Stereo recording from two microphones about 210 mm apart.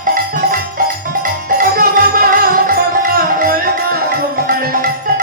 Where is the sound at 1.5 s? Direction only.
40° right (ahead or behind).